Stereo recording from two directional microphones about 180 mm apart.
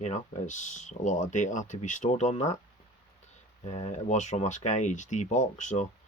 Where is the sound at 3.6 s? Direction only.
40° left (ahead or behind).